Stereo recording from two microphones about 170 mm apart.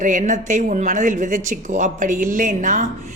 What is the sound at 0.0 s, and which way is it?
A woman's voice, 50° right (ahead or behind).